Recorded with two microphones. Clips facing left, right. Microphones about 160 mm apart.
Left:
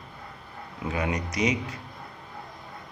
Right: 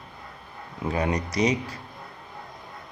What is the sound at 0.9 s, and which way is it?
Speech, 35° right (ahead or behind).